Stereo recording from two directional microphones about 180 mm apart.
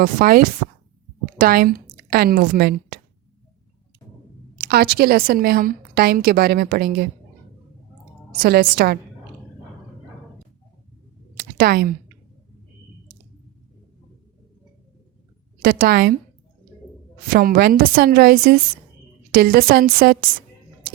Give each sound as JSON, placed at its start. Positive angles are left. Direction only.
{"t": 0.0, "sound": "speech", "side_deg": -55}
{"t": 4.6, "sound": "a woman's voice", "side_deg": -60}
{"t": 8.4, "sound": "a woman's voice", "side_deg": -60}
{"t": 11.3, "sound": "a sound", "side_deg": -55}
{"t": 15.6, "sound": "a woman's voice", "side_deg": -55}
{"t": 17.2, "sound": "a woman's voice", "side_deg": -55}